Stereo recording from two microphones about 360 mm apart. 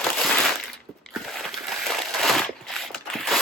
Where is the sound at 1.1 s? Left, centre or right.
Centre.